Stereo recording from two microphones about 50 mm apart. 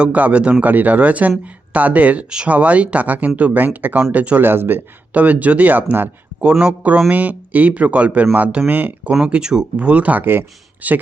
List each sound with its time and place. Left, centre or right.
0.0 s speech: right
4.4 s speech: right
5.1 s speech: right
6.4 s speech: centre
7.1 s speech: right
9.2 s speech: centre; by 11.0 s right